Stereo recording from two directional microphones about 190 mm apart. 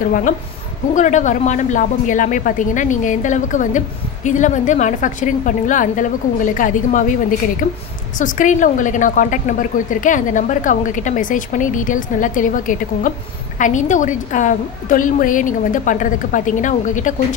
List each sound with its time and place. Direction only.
0.9 s a woman's voice: 40° left (ahead or behind)